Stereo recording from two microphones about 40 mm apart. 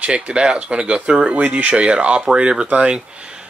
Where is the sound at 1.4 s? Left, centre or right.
Right.